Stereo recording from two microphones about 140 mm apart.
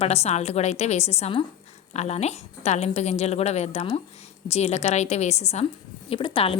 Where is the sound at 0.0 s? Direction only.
45° left (ahead or behind).